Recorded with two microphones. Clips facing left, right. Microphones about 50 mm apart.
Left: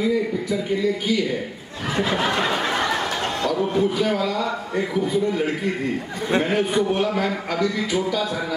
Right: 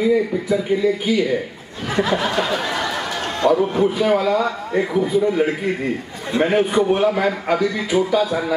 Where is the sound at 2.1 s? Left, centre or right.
Left.